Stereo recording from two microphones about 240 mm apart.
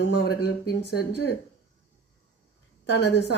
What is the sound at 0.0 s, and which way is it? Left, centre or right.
A woman's voice, left.